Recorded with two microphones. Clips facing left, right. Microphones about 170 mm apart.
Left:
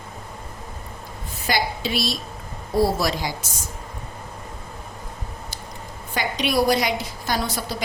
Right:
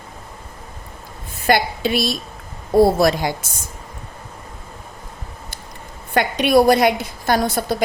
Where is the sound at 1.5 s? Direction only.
55° right (ahead or behind).